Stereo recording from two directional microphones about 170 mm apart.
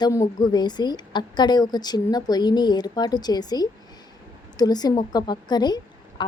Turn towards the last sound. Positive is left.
turn(degrees=25)  # may be behind; listen again after turning